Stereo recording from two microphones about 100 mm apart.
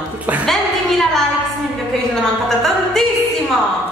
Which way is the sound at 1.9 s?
5° left (ahead or behind).